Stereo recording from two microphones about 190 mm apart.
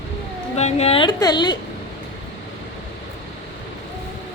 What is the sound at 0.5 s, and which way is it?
A woman's voice, 35° left (ahead or behind).